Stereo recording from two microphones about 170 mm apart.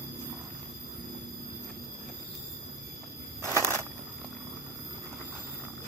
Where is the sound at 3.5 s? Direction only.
15° right (ahead or behind).